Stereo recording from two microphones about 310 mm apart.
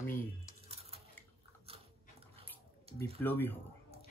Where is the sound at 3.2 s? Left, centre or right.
Centre.